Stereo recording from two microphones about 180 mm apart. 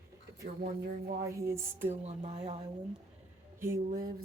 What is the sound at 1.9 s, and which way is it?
Speech, 35° right (ahead or behind).